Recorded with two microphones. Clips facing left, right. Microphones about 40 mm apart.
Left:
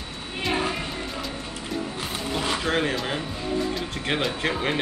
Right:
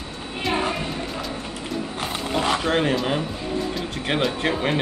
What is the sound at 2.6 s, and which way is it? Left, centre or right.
Speech, centre.